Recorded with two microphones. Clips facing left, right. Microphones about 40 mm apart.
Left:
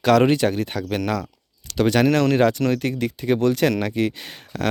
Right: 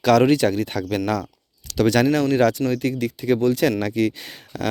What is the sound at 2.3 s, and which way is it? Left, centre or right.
Speech, left.